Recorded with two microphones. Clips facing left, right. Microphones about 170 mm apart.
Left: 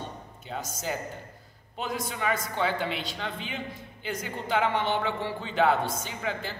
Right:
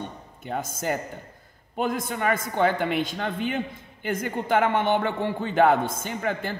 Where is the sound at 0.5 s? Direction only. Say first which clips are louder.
Right 5 dB; 50° right (ahead or behind).